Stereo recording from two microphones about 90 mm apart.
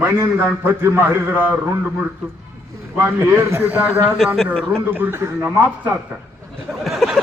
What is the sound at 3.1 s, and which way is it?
A man's voice, 25° right (ahead or behind).